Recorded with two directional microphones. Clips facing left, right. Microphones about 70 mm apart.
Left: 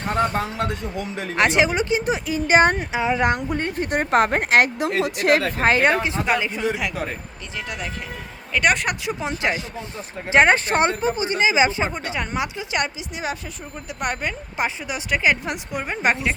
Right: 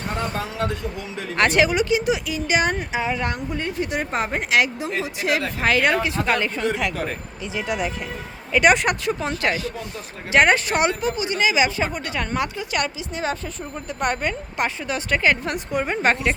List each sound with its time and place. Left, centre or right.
1.4 s speech: left
2.7 s speech: centre
3.2 s speech: left
4.8 s speech: left
5.6 s speech: left
6.3 s a woman's voice: centre
7.5 s a woman's voice: centre
9.3 s speech: left
14.0 s a woman's voice: centre